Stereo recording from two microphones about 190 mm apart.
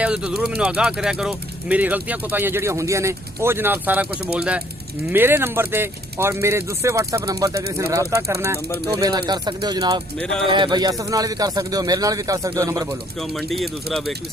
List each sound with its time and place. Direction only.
0.0 s speech: 5° right (ahead or behind)
13.1 s speech: centre (ahead or behind)